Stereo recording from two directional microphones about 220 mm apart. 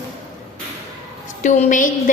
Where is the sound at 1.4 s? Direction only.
35° left (ahead or behind).